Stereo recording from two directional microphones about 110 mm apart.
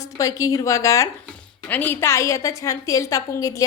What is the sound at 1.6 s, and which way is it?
A woman's voice, 15° left (ahead or behind).